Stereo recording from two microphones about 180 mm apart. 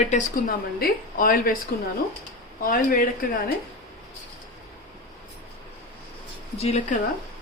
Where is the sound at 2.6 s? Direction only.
50° left (ahead or behind).